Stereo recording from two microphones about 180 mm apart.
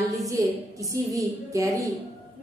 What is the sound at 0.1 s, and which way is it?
A woman's voice, 20° right (ahead or behind).